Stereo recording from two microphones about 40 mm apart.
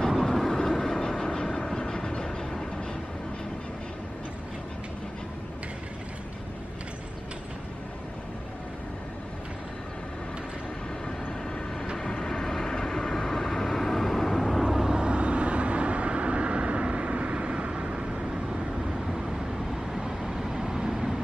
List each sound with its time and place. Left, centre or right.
0.1 s train: centre
12.0 s vehicle: centre
14.6 s vehicle: centre
15.0 s vehicle: right